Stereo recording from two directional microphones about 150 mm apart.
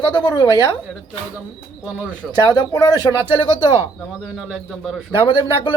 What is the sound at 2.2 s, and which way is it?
Speech, centre (ahead or behind).